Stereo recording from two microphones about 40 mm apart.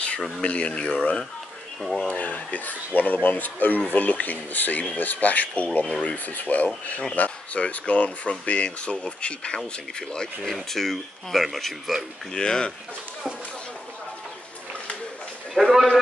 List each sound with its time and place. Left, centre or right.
0.4 s speech: left
2.0 s speech: left; by 10.5 s centre
10.5 s speech: centre
12.3 s speech: centre
15.5 s speech: centre